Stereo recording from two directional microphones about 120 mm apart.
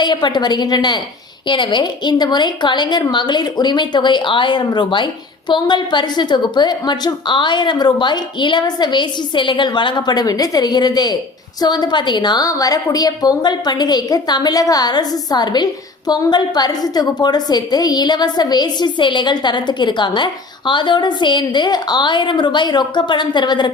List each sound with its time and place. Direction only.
0.0 s a woman's voice: 40° left (ahead or behind)